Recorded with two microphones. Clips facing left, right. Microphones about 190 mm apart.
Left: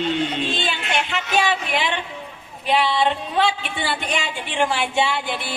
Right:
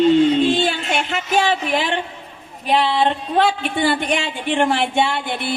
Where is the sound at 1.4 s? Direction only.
45° right (ahead or behind).